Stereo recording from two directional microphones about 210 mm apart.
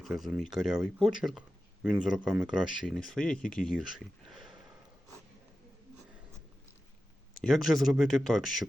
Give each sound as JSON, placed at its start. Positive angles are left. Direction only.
{"t": 0.0, "sound": "speech", "side_deg": 0}
{"t": 7.3, "sound": "speech", "side_deg": 0}